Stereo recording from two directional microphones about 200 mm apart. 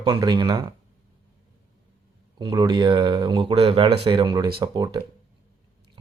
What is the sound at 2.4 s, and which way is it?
Speech, 20° right (ahead or behind).